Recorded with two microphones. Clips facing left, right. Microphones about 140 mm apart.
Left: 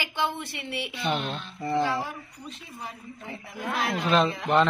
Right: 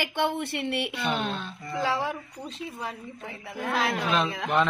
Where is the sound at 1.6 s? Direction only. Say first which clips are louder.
Left 10 dB; 30° left (ahead or behind).